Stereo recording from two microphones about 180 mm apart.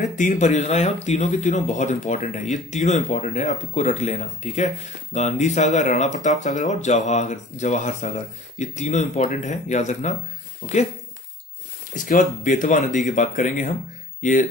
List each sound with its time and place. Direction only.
0.1 s speech: 45° left (ahead or behind)
11.9 s speech: 45° left (ahead or behind)